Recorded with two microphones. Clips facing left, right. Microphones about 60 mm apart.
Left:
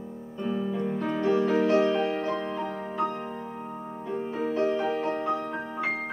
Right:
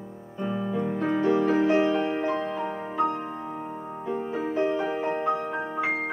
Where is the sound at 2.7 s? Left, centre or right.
Right.